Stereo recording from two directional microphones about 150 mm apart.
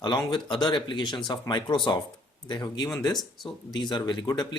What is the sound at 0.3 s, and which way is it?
Speech, 30° left (ahead or behind).